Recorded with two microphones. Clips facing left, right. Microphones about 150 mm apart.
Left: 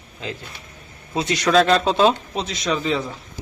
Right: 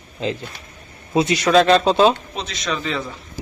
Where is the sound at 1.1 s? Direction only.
10° right (ahead or behind); by 3.0 s 15° left (ahead or behind).